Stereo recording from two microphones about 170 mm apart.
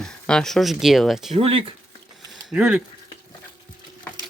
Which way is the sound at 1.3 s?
35° right (ahead or behind).